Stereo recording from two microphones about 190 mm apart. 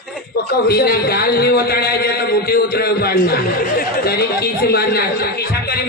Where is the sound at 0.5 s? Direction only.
55° left (ahead or behind).